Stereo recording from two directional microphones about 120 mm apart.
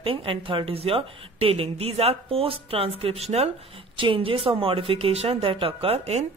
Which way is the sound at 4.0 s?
45° right (ahead or behind).